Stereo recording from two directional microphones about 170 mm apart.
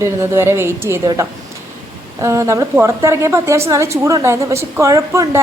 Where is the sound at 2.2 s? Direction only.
20° right (ahead or behind).